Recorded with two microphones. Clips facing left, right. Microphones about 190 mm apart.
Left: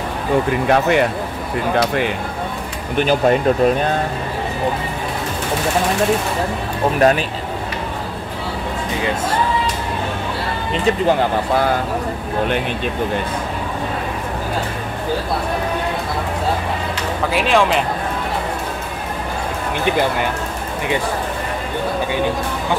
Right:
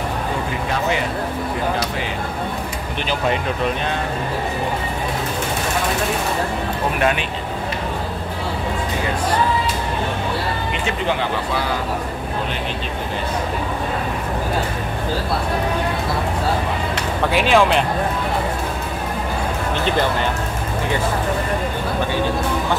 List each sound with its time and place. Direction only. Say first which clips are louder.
0.7 s speech: left 6 dB; 60° left (ahead or behind)
3.0 s speech: left 7 dB; 45° left (ahead or behind)
7.0 s speech: left 7 dB; 40° left (ahead or behind)
10.9 s speech: left 7 dB; 45° left (ahead or behind)
17.3 s speech: right 1 dB; centre (ahead or behind)
19.8 s speech: left 3 dB; 10° left (ahead or behind)